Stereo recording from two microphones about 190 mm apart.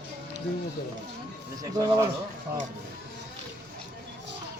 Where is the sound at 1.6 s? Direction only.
20° right (ahead or behind).